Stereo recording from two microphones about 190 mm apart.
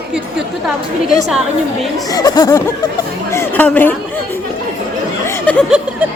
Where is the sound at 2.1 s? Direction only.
20° left (ahead or behind).